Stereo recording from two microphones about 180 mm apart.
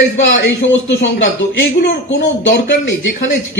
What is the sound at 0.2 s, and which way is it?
A man's voice, 90° left.